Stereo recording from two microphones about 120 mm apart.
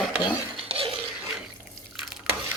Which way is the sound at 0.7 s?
50° right (ahead or behind).